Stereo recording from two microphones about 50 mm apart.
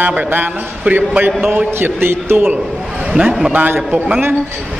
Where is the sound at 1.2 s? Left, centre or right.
Right.